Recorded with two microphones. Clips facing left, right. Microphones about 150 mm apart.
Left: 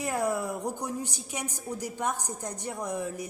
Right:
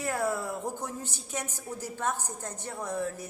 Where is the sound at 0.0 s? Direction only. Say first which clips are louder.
Left 1 dB; 15° left (ahead or behind).